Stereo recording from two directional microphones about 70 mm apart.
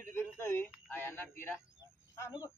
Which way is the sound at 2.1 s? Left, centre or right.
Left.